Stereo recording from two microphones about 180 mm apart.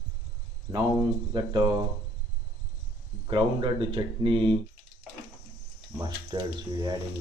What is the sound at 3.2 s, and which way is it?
Speech, 30° right (ahead or behind).